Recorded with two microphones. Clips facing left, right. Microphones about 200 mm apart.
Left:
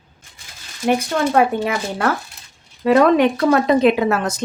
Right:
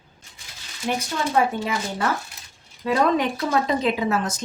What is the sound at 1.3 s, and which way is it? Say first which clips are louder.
A woman's voice: left 3 dB; 65° left (ahead or behind).